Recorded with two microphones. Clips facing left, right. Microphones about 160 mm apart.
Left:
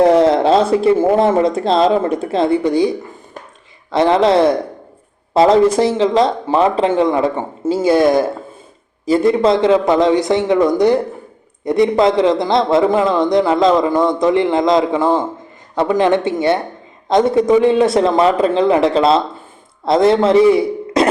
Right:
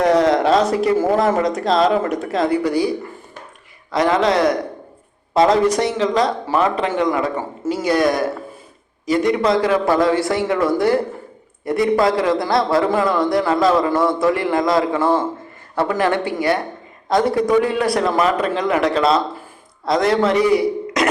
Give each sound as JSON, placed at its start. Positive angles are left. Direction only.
{"t": 0.0, "sound": "a man's voice", "side_deg": 30}
{"t": 3.9, "sound": "a man's voice", "side_deg": 30}